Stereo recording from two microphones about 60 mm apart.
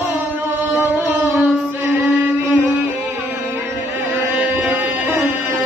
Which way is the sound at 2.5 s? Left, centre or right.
Right.